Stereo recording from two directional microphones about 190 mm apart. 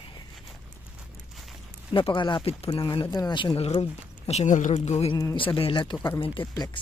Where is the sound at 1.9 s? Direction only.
25° left (ahead or behind).